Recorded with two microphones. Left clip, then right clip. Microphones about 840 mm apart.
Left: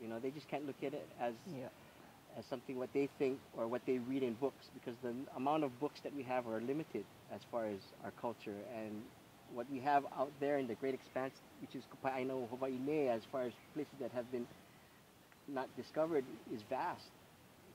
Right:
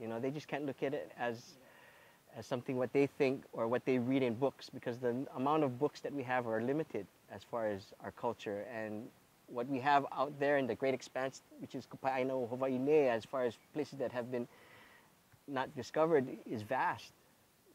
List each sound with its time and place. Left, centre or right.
0.0 s speech: right
2.5 s speech: right
15.5 s speech: right